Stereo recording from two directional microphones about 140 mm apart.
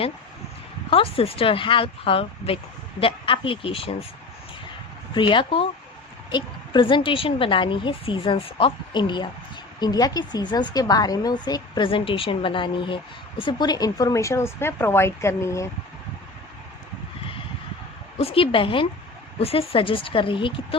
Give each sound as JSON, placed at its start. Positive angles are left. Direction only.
{"t": 0.9, "sound": "a woman's voice", "side_deg": 40}
{"t": 5.1, "sound": "a woman's voice", "side_deg": 35}
{"t": 18.2, "sound": "a woman's voice", "side_deg": 40}